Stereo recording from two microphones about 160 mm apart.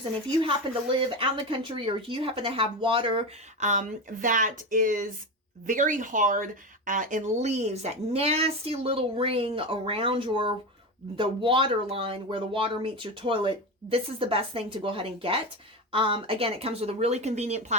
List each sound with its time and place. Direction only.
0.0 s speech: 35° right (ahead or behind)
3.6 s speech: 50° right (ahead or behind)